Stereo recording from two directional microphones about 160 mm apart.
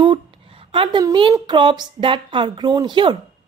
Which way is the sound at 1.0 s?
30° right (ahead or behind).